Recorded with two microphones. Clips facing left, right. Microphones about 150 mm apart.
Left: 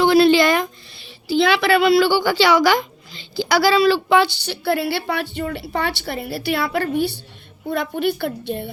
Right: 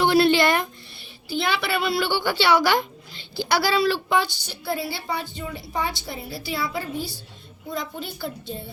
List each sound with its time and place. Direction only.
0.0 s a woman's voice: 90° left; by 8.7 s 65° left (ahead or behind)